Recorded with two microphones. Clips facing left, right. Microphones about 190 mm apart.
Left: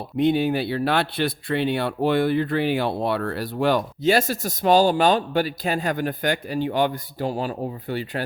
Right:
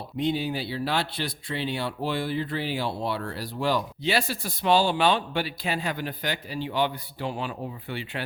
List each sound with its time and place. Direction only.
0.2 s speech: 55° left (ahead or behind); by 8.2 s 40° left (ahead or behind)